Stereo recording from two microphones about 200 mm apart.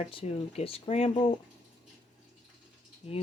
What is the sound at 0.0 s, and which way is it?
Speech, 30° left (ahead or behind).